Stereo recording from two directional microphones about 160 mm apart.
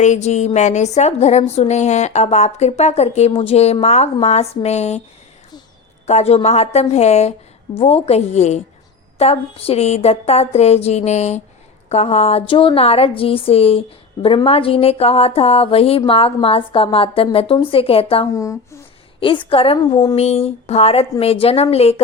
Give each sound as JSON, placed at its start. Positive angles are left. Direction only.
{"t": 0.0, "sound": "a woman's voice", "side_deg": 45}
{"t": 6.1, "sound": "a woman's voice", "side_deg": 40}
{"t": 18.3, "sound": "speech", "side_deg": 20}
{"t": 19.2, "sound": "a woman's voice", "side_deg": 30}
{"t": 20.1, "sound": "a woman's voice", "side_deg": 40}